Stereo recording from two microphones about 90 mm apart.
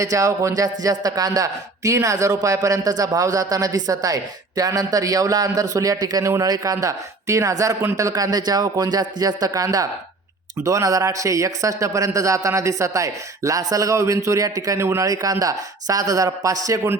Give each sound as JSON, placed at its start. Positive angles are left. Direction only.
{"t": 0.0, "sound": "a man's voice", "side_deg": -40}